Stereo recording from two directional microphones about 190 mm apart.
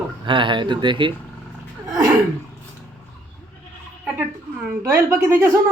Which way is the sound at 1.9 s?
20° right (ahead or behind).